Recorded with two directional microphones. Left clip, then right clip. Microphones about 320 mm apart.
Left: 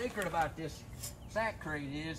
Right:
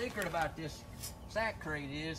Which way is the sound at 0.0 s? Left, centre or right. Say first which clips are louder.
Left 2 dB; centre.